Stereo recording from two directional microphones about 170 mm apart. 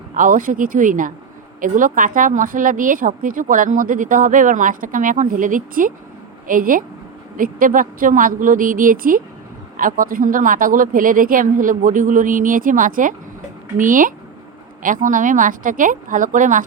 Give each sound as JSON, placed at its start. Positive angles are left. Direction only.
{"t": 0.1, "sound": "speech", "side_deg": -50}